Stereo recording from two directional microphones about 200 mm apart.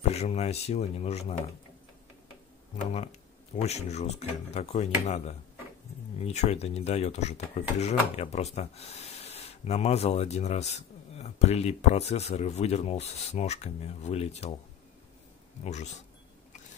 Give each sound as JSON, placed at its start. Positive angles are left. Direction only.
{"t": 0.1, "sound": "speech", "side_deg": 30}
{"t": 3.6, "sound": "speech", "side_deg": 35}
{"t": 15.6, "sound": "speech", "side_deg": 35}